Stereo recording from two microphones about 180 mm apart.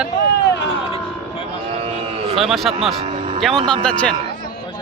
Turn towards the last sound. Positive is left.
turn(degrees=5)  # may be behind; listen again after turning